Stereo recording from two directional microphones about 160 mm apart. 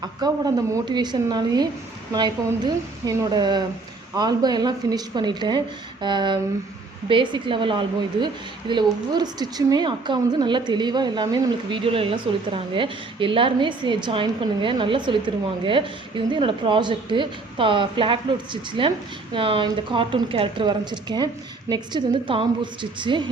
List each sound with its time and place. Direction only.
0.0 s a woman's voice: 25° right (ahead or behind)